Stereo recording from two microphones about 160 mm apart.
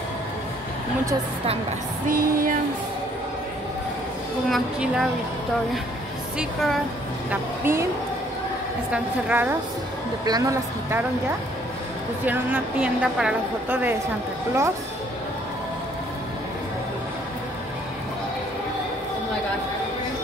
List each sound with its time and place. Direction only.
2.0 s female singing: 60° right (ahead or behind)
4.5 s a woman's voice: centre (ahead or behind)
6.3 s a woman's voice: centre (ahead or behind)
7.2 s a woman's voice: 15° right (ahead or behind)
8.9 s a woman's voice: 10° right (ahead or behind)
10.2 s speech: 20° right (ahead or behind)
12.3 s a woman's voice: 10° right (ahead or behind)